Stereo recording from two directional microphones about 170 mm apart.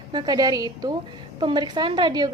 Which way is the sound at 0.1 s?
25° right (ahead or behind).